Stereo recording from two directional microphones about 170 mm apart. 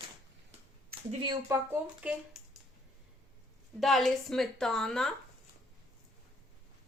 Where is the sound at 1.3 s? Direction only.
15° right (ahead or behind).